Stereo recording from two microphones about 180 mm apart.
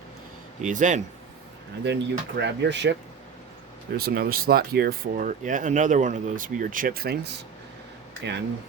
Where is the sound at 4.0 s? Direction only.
60° right (ahead or behind).